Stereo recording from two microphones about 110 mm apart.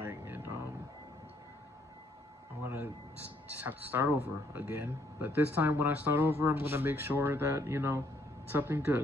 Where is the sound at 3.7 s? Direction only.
15° right (ahead or behind).